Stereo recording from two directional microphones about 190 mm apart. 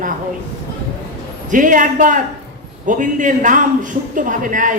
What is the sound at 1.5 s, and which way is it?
A man's voice, 45° right (ahead or behind).